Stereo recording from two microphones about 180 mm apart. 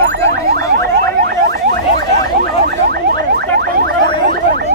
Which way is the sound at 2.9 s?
60° right (ahead or behind).